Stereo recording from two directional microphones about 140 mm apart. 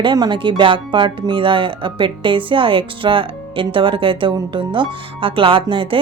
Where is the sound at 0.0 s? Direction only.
35° right (ahead or behind).